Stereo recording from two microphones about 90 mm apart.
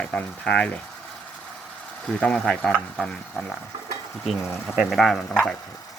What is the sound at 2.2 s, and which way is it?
Speech, 10° left (ahead or behind).